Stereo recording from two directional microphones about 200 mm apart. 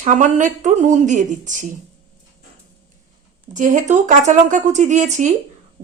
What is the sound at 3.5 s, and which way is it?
A woman's voice, 40° right (ahead or behind).